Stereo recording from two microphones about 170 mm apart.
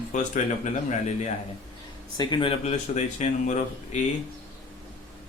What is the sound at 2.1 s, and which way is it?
Speech, 25° left (ahead or behind).